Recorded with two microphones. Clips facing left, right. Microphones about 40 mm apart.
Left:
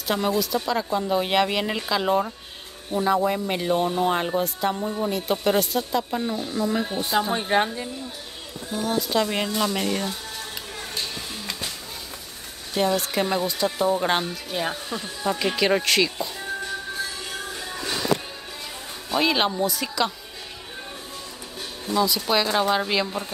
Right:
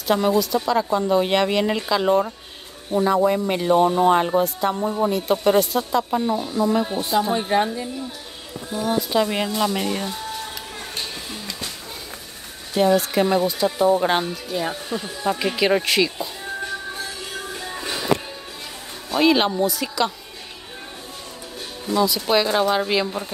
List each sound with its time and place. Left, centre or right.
0.0 s speech: centre
4.7 s speech: centre
5.1 s speech: centre
7.5 s speech: centre
8.7 s speech: centre
12.7 s speech: centre
19.0 s speech: centre
21.9 s speech: centre